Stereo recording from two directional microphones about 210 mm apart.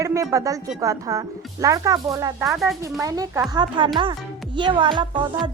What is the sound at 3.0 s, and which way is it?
Speech, 15° right (ahead or behind).